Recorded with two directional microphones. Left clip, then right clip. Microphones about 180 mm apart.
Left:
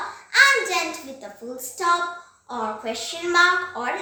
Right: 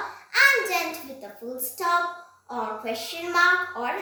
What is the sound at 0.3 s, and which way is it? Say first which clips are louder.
Hands: left 3 dB; 20° left (ahead or behind).